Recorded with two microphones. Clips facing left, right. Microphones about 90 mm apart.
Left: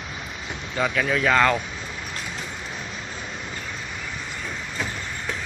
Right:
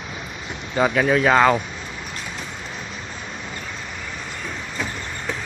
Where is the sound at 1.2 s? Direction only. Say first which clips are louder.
Right 3 dB; 15° right (ahead or behind).